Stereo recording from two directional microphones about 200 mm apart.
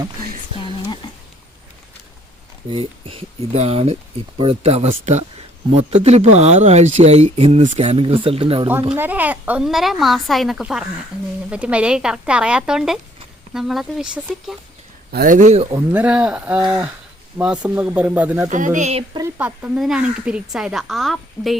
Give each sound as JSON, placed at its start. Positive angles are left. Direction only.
{"t": 0.6, "sound": "speech", "side_deg": 20}
{"t": 2.6, "sound": "speech", "side_deg": -25}
{"t": 9.0, "sound": "speech", "side_deg": -10}
{"t": 15.1, "sound": "speech", "side_deg": -45}
{"t": 15.7, "sound": "speech", "side_deg": -10}
{"t": 18.4, "sound": "speech", "side_deg": -40}
{"t": 19.4, "sound": "speech", "side_deg": -5}